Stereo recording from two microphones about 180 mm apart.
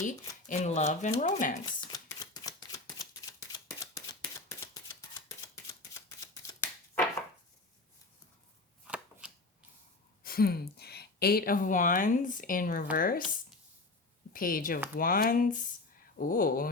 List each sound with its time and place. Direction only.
0.4 s speech: 40° left (ahead or behind)
1.6 s a sound: 25° left (ahead or behind)
6.4 s a sound: 15° left (ahead or behind)
8.9 s chopping: 5° right (ahead or behind)
10.2 s speech: 55° left (ahead or behind)
14.3 s speech: 50° left (ahead or behind)